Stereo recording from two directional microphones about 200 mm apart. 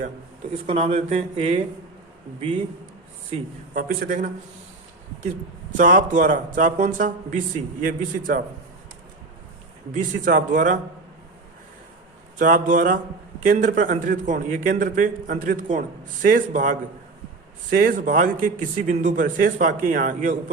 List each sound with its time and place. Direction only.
0.7 s a man's voice: 35° right (ahead or behind)
3.8 s a man's voice: 40° right (ahead or behind)
5.7 s a man's voice: 40° right (ahead or behind)
9.9 s speech: 45° right (ahead or behind)
12.4 s speech: 45° right (ahead or behind)